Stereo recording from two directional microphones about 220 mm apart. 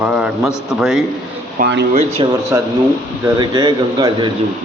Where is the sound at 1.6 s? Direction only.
50° right (ahead or behind).